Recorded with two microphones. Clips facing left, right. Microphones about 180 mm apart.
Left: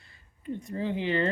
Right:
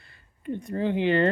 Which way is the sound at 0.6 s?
60° right (ahead or behind).